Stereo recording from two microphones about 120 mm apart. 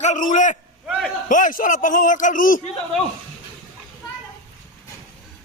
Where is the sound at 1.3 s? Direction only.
90° left.